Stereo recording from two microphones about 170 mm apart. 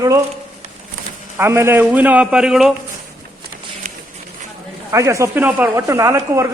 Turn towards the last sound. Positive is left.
turn(degrees=-15)  # may be behind; listen again after turning